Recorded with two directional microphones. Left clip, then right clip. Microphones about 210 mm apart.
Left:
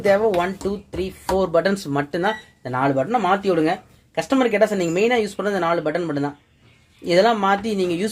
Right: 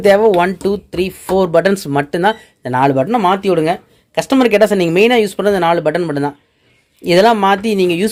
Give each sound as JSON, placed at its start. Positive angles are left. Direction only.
{"t": 0.0, "sound": "speech", "side_deg": -45}